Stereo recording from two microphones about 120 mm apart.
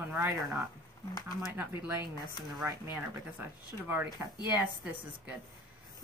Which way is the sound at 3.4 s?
15° right (ahead or behind).